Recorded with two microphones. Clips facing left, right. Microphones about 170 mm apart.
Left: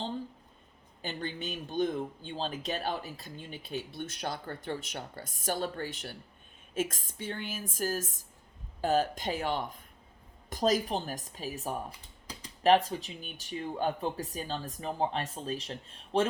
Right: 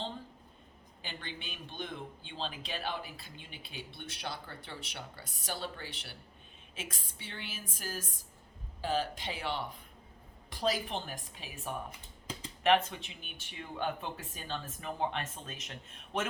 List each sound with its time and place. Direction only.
1.0 s a man's voice: 40° left (ahead or behind)